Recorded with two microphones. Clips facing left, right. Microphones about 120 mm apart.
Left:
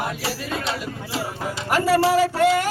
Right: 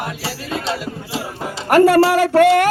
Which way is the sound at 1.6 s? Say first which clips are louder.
Right 7 dB; 60° right (ahead or behind).